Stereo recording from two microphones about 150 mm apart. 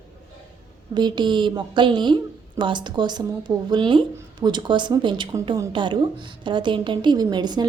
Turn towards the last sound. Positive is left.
turn(degrees=-30)  # may be behind; listen again after turning